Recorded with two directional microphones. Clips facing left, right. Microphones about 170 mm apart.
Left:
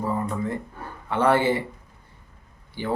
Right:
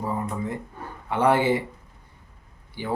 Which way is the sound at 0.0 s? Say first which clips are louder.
Left 2 dB; 15° right (ahead or behind).